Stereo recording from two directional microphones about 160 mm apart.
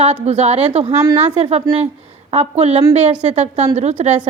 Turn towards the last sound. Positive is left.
turn(degrees=-45)  # may be behind; listen again after turning